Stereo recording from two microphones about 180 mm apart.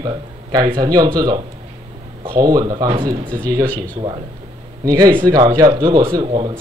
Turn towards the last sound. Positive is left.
turn(degrees=-30)  # may be behind; listen again after turning